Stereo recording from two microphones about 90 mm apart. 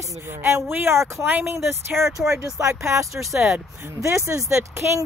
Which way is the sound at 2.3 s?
30° right (ahead or behind).